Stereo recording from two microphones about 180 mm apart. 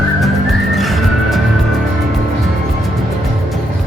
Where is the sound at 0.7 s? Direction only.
Centre (ahead or behind).